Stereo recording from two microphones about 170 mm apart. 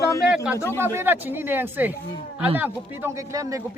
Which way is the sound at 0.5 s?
15° left (ahead or behind).